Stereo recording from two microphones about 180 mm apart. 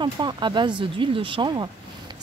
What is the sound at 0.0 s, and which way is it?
Speech, 25° right (ahead or behind).